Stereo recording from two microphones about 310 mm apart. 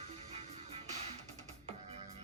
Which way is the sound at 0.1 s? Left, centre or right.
Centre.